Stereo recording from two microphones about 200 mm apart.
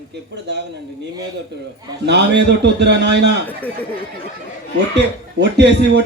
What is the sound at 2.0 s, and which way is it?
A man's voice, 60° right (ahead or behind).